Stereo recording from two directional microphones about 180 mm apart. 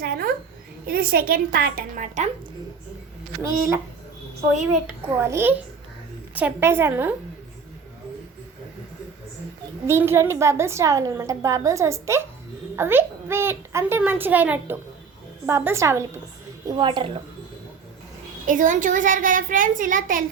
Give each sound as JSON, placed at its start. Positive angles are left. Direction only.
{"t": 0.0, "sound": "a sound", "side_deg": -55}
{"t": 0.9, "sound": "a woman's voice", "side_deg": -55}
{"t": 3.4, "sound": "a woman's voice", "side_deg": -15}
{"t": 5.0, "sound": "a woman's voice", "side_deg": -15}
{"t": 9.8, "sound": "a woman's voice", "side_deg": -15}
{"t": 18.4, "sound": "a child's voice", "side_deg": -45}